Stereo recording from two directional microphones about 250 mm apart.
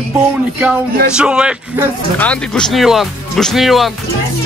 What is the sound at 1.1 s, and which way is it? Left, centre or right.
Speech, centre.